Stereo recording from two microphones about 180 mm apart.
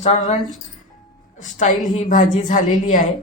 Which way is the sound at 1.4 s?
45° left (ahead or behind).